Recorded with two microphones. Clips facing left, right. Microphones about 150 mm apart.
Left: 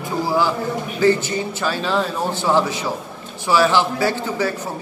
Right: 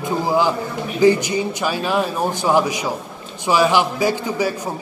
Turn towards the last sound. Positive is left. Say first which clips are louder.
# right 1 dB
turn(degrees=-15)  # may be behind; listen again after turning